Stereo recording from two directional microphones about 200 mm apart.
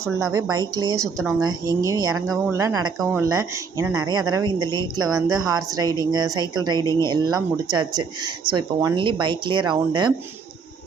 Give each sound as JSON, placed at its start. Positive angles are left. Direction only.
{"t": 0.0, "sound": "speech", "side_deg": -15}